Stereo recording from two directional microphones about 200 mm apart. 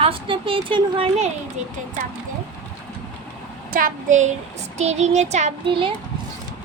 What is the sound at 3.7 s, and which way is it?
Child singing, 45° right (ahead or behind).